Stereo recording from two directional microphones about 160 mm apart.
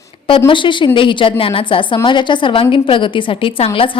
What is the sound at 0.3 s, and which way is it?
A woman's voice, 30° left (ahead or behind).